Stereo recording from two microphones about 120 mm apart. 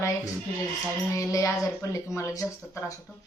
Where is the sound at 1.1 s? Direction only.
25° left (ahead or behind).